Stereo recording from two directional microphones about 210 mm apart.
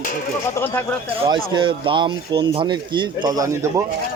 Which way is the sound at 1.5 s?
25° right (ahead or behind).